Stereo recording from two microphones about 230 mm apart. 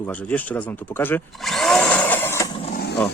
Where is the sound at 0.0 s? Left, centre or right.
Centre.